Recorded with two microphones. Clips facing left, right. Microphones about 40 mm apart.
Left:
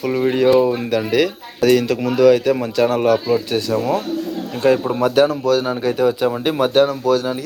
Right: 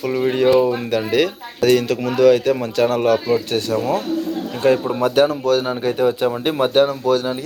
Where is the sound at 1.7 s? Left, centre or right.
Centre.